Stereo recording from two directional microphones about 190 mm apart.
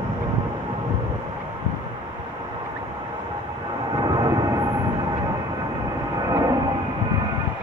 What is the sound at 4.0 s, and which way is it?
Vehicle, 20° right (ahead or behind).